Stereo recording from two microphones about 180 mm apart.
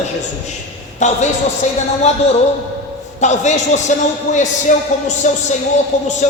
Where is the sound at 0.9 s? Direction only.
40° left (ahead or behind).